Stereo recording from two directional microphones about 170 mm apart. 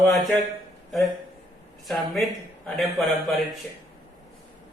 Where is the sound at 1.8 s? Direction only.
Centre (ahead or behind).